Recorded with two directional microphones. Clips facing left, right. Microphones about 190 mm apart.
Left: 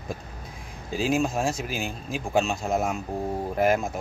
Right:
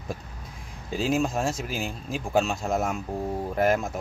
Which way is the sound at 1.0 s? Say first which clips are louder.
Left 1 dB; centre (ahead or behind).